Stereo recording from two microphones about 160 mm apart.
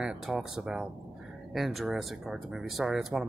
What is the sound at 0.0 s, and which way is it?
Speech, 5° right (ahead or behind).